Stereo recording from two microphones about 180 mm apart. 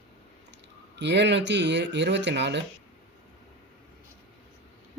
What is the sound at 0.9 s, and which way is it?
Speech, 75° right (ahead or behind).